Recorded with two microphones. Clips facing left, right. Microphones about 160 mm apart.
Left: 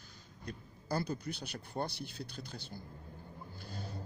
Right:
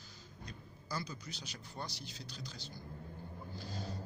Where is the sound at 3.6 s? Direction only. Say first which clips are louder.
Right 1 dB; 55° left (ahead or behind).